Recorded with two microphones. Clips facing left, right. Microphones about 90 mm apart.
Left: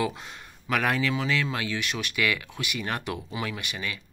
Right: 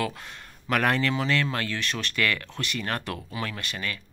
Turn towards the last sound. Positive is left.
turn(degrees=15)  # may be behind; listen again after turning